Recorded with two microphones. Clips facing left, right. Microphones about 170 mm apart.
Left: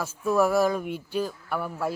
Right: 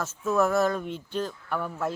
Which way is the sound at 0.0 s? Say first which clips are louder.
Left 2 dB; 10° left (ahead or behind).